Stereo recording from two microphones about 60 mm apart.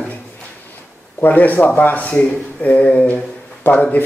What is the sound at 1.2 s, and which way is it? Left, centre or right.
Speech, left.